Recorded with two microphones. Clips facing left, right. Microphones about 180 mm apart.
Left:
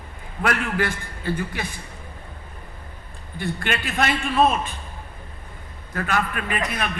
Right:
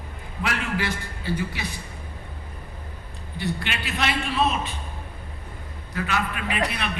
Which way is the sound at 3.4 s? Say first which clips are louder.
Left 3 dB; 50° left (ahead or behind).